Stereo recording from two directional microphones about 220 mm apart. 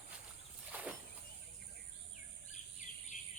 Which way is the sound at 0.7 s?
5° right (ahead or behind).